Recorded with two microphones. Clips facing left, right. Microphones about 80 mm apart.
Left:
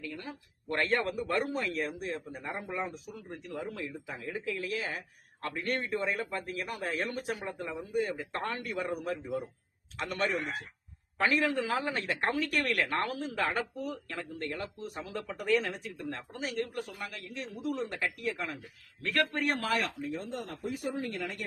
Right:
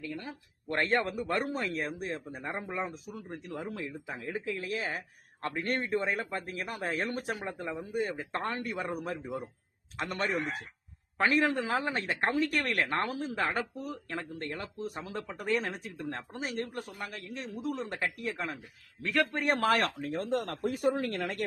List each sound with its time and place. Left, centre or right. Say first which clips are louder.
0.7 s a man's voice: right 1 dB; right
7.7 s a man's voice: left 1 dB; right
14.2 s a man's voice: left 1 dB; right
19.6 s speech: right 4 dB; right
20.0 s speech: right 5 dB; right